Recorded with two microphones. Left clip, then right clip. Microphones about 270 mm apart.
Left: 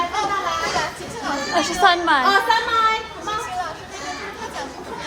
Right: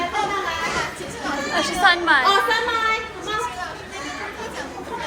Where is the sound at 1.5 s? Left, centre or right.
Left.